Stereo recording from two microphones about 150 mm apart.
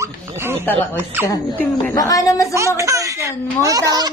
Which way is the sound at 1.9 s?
20° left (ahead or behind).